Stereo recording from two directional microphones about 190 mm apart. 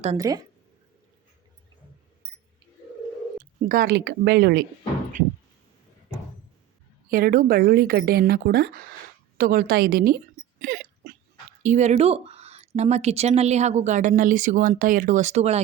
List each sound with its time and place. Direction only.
0.2 s a woman's voice: 20° right (ahead or behind)
2.2 s a sound: 60° right (ahead or behind)
3.3 s speech: 45° right (ahead or behind)
7.1 s speech: 50° right (ahead or behind)
10.6 s hiccup: 50° right (ahead or behind)
11.6 s a woman's voice: 40° right (ahead or behind)